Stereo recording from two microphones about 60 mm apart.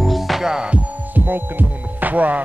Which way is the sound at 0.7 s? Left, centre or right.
Right.